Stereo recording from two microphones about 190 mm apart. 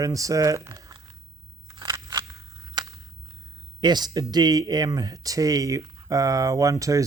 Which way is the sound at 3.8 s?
20° right (ahead or behind).